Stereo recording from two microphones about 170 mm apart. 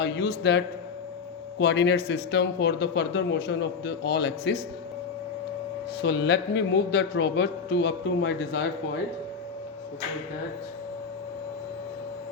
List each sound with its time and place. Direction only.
0.0 s speech: 75° left (ahead or behind)
6.0 s a man's voice: 85° left